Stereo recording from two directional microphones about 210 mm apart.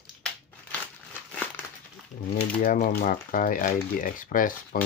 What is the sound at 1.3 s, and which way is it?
Crumpling, 10° left (ahead or behind).